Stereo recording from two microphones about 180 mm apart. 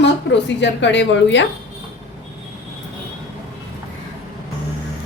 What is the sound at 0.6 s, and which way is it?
Speech, 80° left.